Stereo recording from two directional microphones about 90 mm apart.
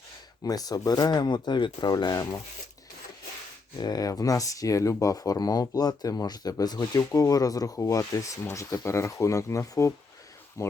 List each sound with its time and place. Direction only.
0.4 s speech: 45° left (ahead or behind)
3.8 s speech: 45° left (ahead or behind)